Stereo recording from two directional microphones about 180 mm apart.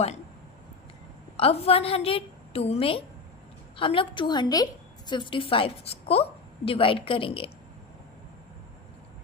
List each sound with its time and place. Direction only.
1.4 s a woman's voice: 35° left (ahead or behind)